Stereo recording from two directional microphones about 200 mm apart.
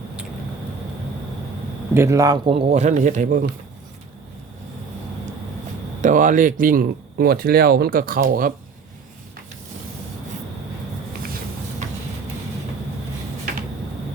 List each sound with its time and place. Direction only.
1.9 s a man's voice: 15° right (ahead or behind); by 3.5 s 40° right (ahead or behind)
6.0 s speech: 40° right (ahead or behind)
11.8 s a sound: 35° right (ahead or behind)